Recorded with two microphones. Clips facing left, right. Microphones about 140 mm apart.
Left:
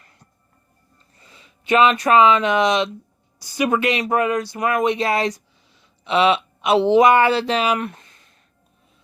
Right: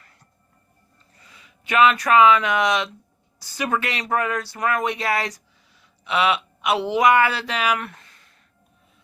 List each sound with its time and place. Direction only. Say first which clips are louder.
1.2 s a woman's voice: left 2 dB; 30° left (ahead or behind)